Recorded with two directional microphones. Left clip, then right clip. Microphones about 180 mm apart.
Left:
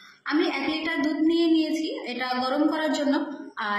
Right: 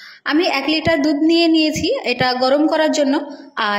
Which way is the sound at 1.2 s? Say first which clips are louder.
Right 8 dB; 45° right (ahead or behind).